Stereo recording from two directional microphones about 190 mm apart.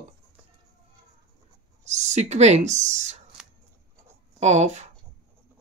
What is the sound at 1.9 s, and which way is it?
Speech, 40° right (ahead or behind).